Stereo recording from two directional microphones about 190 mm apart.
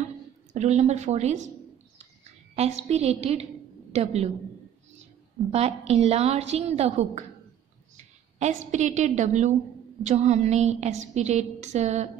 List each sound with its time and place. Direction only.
0.5 s a woman's voice: 35° right (ahead or behind)
2.5 s a woman's voice: 35° right (ahead or behind)
5.5 s a woman's voice: 35° right (ahead or behind)
8.4 s a woman's voice: 40° right (ahead or behind)